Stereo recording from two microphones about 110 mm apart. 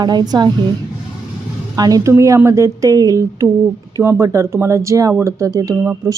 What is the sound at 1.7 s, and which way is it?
A woman's voice, 35° right (ahead or behind).